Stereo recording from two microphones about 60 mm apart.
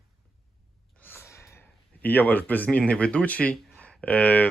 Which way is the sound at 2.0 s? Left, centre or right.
Left.